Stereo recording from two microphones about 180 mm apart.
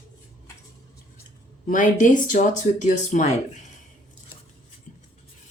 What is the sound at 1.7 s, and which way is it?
Speech, 45° left (ahead or behind).